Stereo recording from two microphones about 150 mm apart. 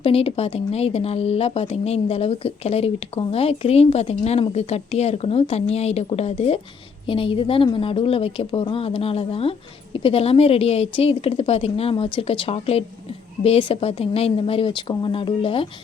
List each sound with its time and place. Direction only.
0.0 s a woman's voice: 40° left (ahead or behind)